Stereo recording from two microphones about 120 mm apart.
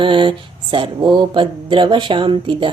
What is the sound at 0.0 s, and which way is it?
Speech, 45° right (ahead or behind).